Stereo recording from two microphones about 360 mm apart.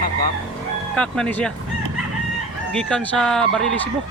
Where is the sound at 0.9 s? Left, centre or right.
Centre.